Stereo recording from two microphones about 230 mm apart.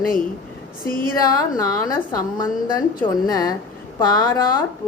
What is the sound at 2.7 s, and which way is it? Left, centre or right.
A woman's voice, centre.